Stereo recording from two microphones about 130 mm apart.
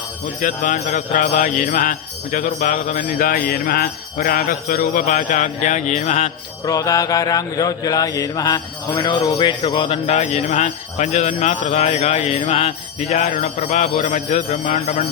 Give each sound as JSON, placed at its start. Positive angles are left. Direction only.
{"t": 0.4, "sound": "jingle bell", "side_deg": 80}
{"t": 6.7, "sound": "mantra", "side_deg": 25}
{"t": 10.1, "sound": "jingle bell", "side_deg": 60}